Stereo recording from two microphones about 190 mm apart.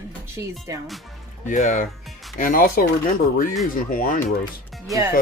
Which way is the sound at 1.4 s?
40° left (ahead or behind).